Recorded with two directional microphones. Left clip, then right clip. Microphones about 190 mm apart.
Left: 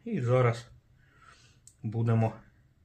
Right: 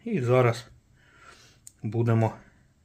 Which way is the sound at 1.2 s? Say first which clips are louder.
Right 5 dB; 45° right (ahead or behind).